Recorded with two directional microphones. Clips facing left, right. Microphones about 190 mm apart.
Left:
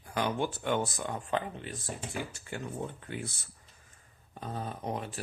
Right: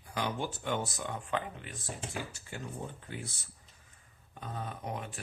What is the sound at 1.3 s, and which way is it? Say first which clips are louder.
Speech: left 3 dB; 35° left (ahead or behind).